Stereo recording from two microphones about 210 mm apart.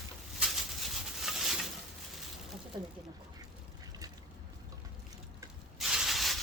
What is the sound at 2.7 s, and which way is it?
Speech, 20° right (ahead or behind).